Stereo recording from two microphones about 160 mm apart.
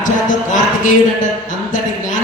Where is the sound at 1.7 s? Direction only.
55° left (ahead or behind).